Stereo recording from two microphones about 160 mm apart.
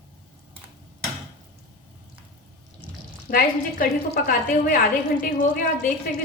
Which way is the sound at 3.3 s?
65° left (ahead or behind).